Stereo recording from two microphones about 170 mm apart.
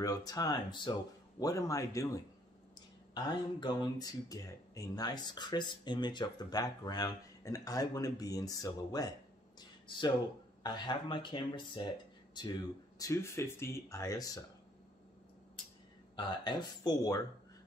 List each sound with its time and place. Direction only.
0.0 s speech: 20° left (ahead or behind)
3.2 s speech: 25° left (ahead or behind)
9.6 s a sound: 25° left (ahead or behind)
10.6 s speech: 25° left (ahead or behind)
16.2 s speech: 25° left (ahead or behind)